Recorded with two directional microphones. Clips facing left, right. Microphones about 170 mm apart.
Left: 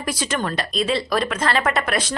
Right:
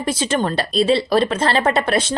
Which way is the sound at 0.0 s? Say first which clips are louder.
Right 5 dB; 25° right (ahead or behind).